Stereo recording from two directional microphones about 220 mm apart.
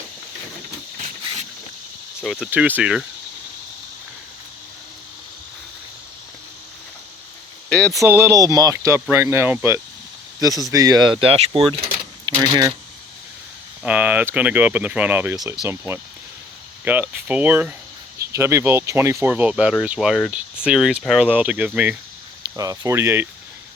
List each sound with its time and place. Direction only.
2.2 s speech: centre (ahead or behind)
7.7 s speech: 5° left (ahead or behind)
7.9 s speech: 10° right (ahead or behind)
13.8 s speech: 5° right (ahead or behind)